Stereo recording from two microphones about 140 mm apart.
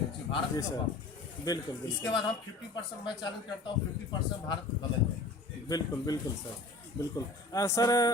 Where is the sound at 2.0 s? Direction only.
35° left (ahead or behind).